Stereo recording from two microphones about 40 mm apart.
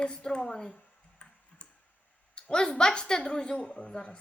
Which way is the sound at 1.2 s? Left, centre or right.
Centre.